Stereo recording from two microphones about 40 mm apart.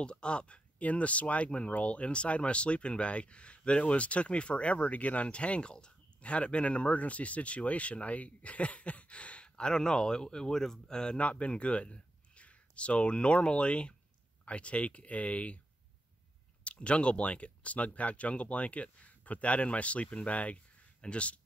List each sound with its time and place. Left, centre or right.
0.0 s speech: left
11.1 s speech: left
16.6 s speech: left